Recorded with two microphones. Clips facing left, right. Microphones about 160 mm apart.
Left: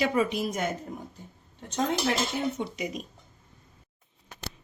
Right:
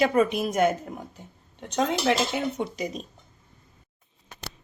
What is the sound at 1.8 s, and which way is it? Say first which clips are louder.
Speech: right 3 dB; 85° right.